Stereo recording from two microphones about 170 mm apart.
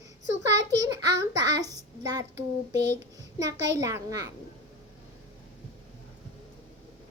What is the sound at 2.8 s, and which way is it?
A child's voice, 90° right.